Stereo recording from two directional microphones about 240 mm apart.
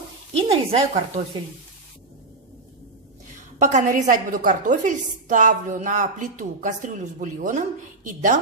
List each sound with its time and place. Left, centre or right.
0.4 s speech: right
3.5 s a woman's voice: right